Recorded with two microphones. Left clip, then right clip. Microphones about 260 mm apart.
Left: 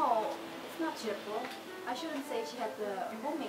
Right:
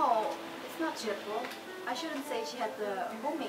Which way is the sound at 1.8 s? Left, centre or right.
Centre.